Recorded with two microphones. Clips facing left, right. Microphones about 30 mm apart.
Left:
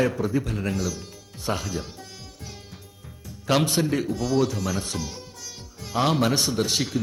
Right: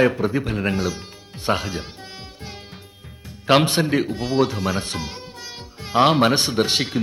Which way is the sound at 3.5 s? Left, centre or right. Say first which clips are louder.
Right 5 dB; right.